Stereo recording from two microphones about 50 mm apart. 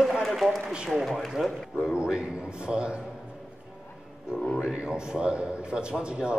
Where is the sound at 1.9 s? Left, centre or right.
Centre.